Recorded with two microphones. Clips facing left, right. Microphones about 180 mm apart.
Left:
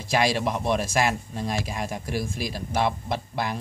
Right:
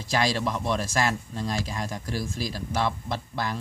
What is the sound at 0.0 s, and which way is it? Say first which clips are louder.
Speech: left 2 dB; 10° left (ahead or behind).